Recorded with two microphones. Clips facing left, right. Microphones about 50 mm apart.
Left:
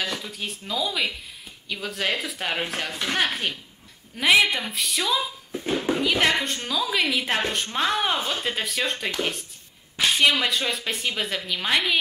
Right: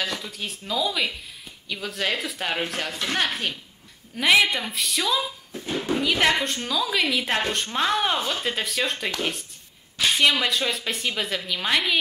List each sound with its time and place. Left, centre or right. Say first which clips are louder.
0.0 s a woman's voice: even; centre
5.5 s speech: left 4 dB; centre
5.9 s a woman's voice: right 2 dB; centre